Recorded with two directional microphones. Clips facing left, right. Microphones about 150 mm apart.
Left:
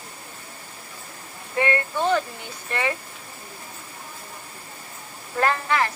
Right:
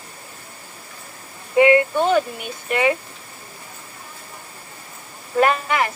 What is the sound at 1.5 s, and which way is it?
Speech, 15° right (ahead or behind).